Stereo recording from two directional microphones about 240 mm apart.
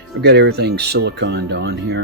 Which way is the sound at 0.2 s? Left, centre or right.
Right.